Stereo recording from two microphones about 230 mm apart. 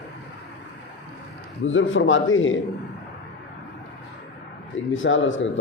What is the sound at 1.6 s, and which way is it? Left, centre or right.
Speech, left.